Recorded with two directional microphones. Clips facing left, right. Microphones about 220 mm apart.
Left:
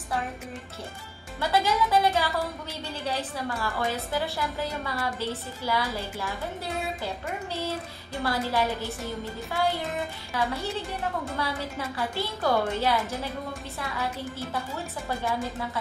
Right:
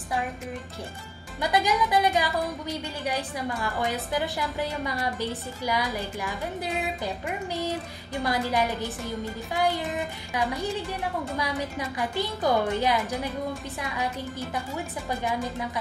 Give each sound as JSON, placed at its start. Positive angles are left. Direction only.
{"t": 1.4, "sound": "a woman's voice", "side_deg": -15}
{"t": 8.2, "sound": "a woman's voice", "side_deg": -15}
{"t": 15.0, "sound": "a woman's voice", "side_deg": -15}